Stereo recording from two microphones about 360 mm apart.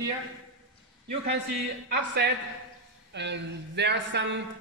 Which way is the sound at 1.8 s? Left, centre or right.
Right.